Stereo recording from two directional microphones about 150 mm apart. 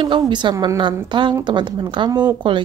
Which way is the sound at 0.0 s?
30° right (ahead or behind).